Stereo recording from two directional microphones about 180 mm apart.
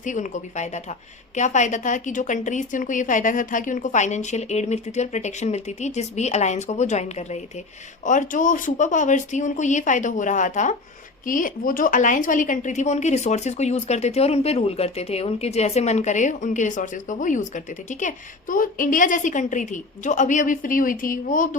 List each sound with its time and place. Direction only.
0.0 s a woman's voice: 45° left (ahead or behind)